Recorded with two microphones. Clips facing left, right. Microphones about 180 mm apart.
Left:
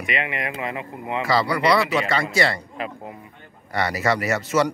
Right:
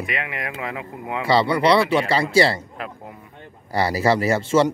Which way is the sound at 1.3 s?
25° right (ahead or behind).